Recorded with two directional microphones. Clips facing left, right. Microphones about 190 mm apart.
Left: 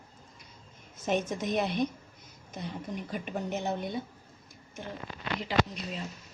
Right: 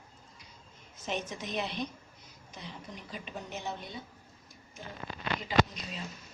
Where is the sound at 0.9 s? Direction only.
50° left (ahead or behind).